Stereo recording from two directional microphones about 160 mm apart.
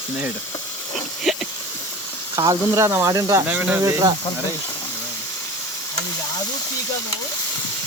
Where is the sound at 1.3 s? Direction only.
Centre (ahead or behind).